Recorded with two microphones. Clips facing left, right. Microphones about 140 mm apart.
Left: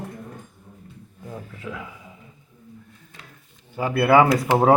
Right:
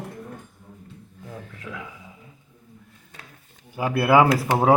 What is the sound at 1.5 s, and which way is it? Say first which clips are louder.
Speech: left 3 dB; centre (ahead or behind).